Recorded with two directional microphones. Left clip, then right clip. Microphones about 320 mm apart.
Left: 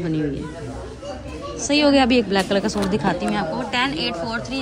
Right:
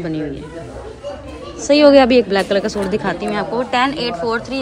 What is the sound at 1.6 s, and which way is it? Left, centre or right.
Speech, centre.